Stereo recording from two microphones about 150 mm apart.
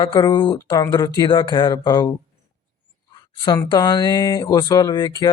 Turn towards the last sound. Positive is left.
turn(degrees=30)  # may be behind; listen again after turning